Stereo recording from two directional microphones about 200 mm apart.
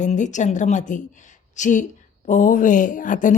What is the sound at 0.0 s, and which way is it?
A woman's voice, 35° left (ahead or behind).